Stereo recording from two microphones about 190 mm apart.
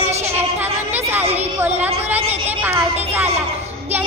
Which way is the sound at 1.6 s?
10° right (ahead or behind).